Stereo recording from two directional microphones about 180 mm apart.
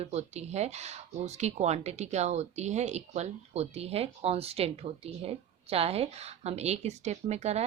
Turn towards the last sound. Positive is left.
turn(degrees=-40)  # may be behind; listen again after turning